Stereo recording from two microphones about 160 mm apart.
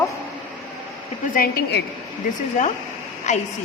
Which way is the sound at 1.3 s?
65° left (ahead or behind).